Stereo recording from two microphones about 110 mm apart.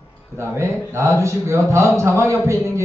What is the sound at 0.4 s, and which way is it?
A man's voice, 25° right (ahead or behind).